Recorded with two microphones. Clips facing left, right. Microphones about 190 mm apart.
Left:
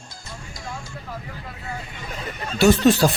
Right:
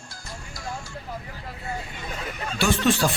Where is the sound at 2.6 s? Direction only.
40° left (ahead or behind).